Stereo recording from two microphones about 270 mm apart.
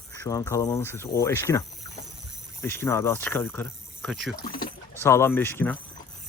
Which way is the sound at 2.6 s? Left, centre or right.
Centre.